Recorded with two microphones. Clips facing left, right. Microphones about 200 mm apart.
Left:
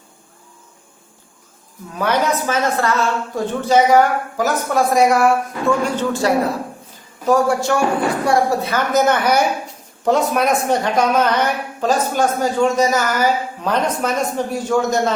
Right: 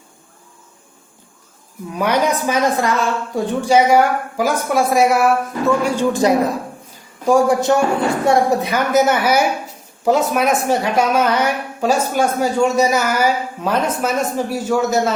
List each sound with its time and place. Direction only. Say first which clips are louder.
2.0 s a woman's voice: right 1 dB; 15° right (ahead or behind)